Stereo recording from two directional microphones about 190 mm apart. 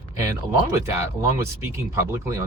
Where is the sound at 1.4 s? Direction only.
15° right (ahead or behind).